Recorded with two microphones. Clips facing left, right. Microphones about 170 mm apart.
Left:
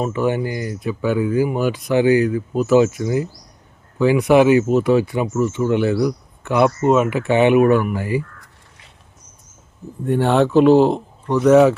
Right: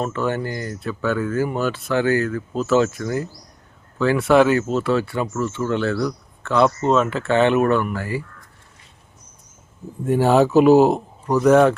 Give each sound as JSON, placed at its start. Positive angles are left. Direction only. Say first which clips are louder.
{"t": 0.0, "sound": "speech", "louder": "left 3 dB", "side_deg": 15}
{"t": 10.1, "sound": "speech", "louder": "even", "side_deg": -5}